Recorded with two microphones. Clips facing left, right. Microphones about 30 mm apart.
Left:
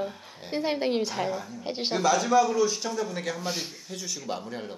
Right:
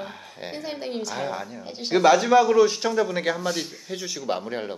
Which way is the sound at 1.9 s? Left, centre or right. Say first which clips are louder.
Right 6 dB; right.